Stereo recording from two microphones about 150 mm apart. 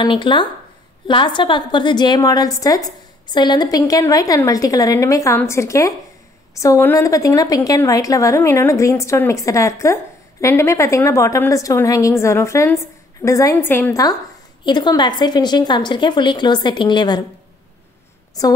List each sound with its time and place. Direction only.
0.0 s a woman's voice: 35° left (ahead or behind)
18.4 s a woman's voice: 25° left (ahead or behind)